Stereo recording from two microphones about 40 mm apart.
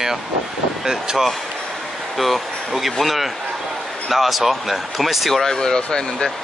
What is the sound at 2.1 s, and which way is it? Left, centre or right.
Speech, centre.